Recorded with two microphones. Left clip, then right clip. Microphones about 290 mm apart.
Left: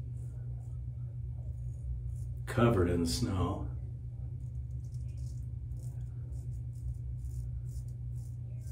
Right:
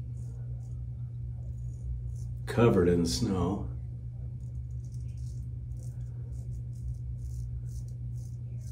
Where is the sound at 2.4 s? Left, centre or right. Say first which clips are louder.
Right 5 dB; centre.